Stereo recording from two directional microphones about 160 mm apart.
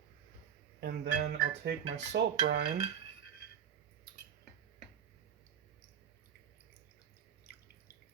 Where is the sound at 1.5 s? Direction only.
90° right.